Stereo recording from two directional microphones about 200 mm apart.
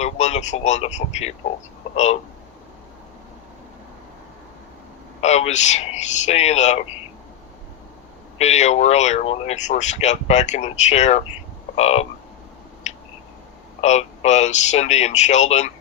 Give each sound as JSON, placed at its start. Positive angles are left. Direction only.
{"t": 0.0, "sound": "speech", "side_deg": 35}
{"t": 5.2, "sound": "speech", "side_deg": 35}
{"t": 8.4, "sound": "speech", "side_deg": 35}
{"t": 12.9, "sound": "a sound", "side_deg": 35}
{"t": 13.8, "sound": "speech", "side_deg": 35}